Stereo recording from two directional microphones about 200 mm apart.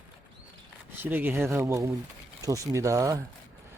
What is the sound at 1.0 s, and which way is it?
Speech, 10° right (ahead or behind).